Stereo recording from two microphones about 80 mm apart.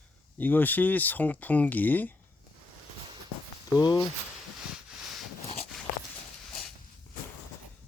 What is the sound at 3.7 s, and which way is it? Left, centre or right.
Speech, left.